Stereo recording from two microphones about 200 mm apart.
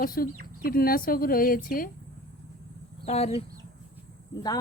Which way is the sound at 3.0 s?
30° left (ahead or behind).